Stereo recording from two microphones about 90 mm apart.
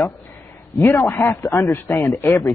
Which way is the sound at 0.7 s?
30° left (ahead or behind).